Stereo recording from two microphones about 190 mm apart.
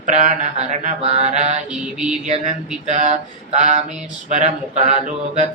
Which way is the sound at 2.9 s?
40° right (ahead or behind).